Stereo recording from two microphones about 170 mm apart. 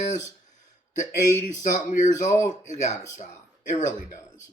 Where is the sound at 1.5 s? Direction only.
50° left (ahead or behind).